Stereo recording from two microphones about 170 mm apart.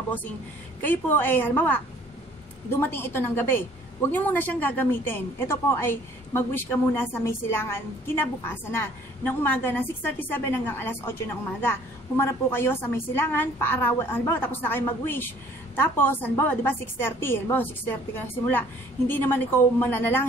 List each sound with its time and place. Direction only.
0.8 s a woman's voice: 10° left (ahead or behind)